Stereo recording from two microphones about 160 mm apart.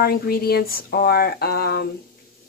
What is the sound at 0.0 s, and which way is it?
Speech, 70° left (ahead or behind).